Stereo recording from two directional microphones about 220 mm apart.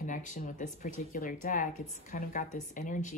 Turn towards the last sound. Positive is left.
turn(degrees=35)  # may be behind; listen again after turning